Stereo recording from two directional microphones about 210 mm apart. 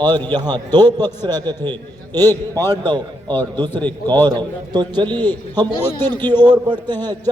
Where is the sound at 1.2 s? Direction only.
20° right (ahead or behind).